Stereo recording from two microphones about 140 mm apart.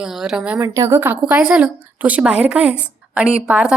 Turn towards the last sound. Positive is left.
turn(degrees=-5)  # may be behind; listen again after turning